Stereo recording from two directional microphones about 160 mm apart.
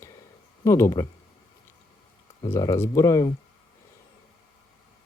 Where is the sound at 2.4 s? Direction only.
20° left (ahead or behind).